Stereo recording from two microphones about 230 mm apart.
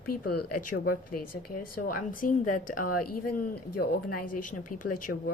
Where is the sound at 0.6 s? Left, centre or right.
Left.